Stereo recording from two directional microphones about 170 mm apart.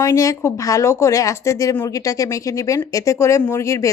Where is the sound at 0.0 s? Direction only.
20° left (ahead or behind).